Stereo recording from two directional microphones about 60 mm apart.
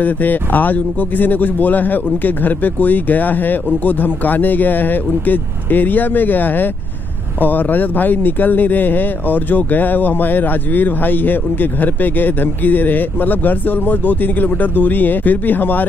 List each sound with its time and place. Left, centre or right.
0.0 s speech: left